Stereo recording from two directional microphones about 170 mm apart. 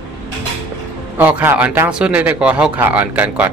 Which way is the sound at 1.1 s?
10° right (ahead or behind).